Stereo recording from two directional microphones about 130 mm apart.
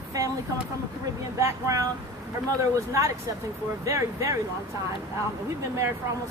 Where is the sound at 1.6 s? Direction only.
25° right (ahead or behind).